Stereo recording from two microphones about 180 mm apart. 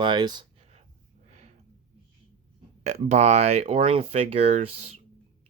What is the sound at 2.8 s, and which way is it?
Speech, 35° right (ahead or behind).